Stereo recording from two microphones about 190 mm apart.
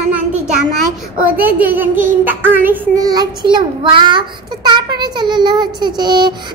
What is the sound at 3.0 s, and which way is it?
A child's voice, 20° right (ahead or behind).